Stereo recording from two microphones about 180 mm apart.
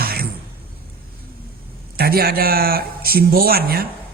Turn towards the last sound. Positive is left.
turn(degrees=-55)  # may be behind; listen again after turning